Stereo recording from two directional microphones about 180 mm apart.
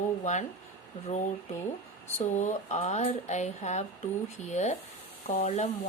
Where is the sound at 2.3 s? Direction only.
40° left (ahead or behind).